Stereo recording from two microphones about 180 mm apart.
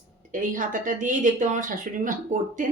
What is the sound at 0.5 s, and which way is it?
Speech, 45° right (ahead or behind).